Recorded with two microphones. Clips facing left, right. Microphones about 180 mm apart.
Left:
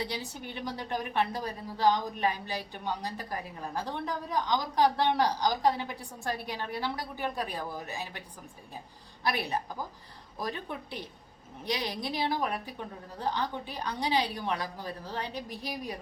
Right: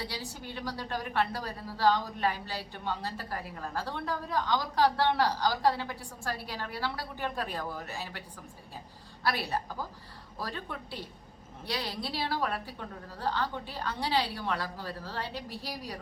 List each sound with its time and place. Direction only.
0.0 s a woman's voice: 20° left (ahead or behind)
9.2 s a woman's voice: 20° left (ahead or behind)